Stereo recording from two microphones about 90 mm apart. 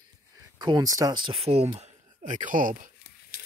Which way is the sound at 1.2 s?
75° right (ahead or behind).